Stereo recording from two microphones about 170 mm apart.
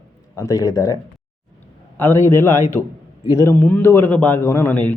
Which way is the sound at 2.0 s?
15° left (ahead or behind).